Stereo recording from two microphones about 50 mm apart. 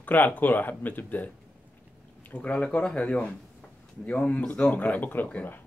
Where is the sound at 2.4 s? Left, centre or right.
Left.